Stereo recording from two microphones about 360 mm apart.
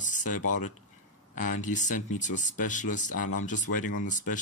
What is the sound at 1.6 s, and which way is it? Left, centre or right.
Speech, left.